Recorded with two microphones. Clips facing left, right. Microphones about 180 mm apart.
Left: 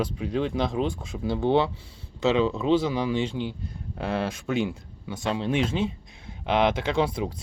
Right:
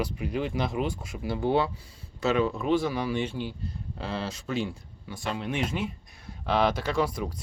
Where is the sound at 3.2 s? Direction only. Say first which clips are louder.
Left 3 dB; 10° right (ahead or behind).